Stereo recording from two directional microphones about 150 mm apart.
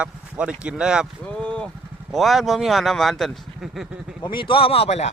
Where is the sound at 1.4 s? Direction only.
10° left (ahead or behind).